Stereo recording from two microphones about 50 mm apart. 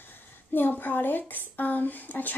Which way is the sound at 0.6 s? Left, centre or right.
Left.